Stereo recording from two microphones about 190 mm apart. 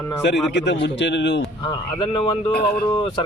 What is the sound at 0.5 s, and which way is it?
Speech, 65° left (ahead or behind).